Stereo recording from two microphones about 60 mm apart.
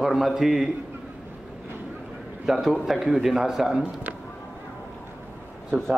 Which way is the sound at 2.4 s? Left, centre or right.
Centre.